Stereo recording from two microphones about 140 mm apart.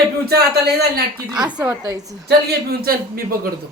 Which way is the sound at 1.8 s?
25° right (ahead or behind).